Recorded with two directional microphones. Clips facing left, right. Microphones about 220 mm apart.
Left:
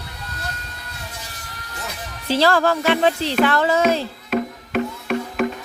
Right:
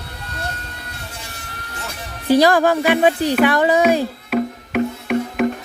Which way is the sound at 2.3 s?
15° right (ahead or behind).